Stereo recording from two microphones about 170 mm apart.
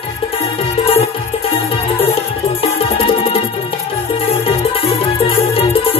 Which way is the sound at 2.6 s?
35° left (ahead or behind).